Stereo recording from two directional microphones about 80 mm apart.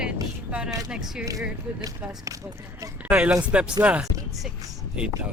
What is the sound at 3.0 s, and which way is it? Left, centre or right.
Speech, centre.